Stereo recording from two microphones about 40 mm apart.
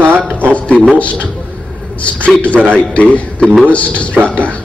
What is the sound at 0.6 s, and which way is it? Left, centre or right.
Speech, left.